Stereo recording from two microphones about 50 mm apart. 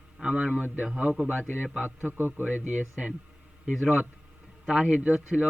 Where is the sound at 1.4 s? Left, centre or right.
Left.